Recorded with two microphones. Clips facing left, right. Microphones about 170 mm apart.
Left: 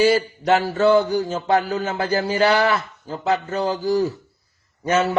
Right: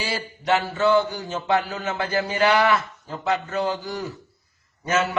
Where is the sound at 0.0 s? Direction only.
45° left (ahead or behind).